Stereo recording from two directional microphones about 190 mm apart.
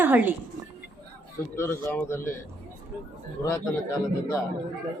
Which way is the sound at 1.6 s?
10° left (ahead or behind).